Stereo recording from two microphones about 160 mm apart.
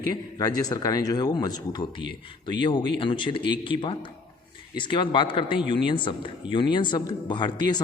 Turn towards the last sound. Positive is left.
turn(degrees=25)  # may be behind; listen again after turning